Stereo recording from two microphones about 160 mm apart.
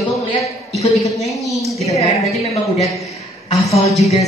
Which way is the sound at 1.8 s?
40° left (ahead or behind).